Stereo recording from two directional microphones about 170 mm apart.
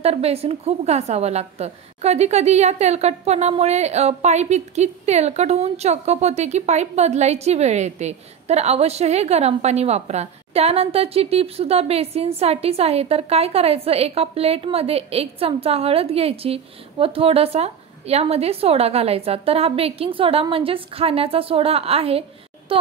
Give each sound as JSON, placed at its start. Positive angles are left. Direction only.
{"t": 0.0, "sound": "a woman's voice", "side_deg": -35}